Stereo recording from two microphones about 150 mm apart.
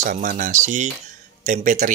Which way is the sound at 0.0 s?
60° right (ahead or behind).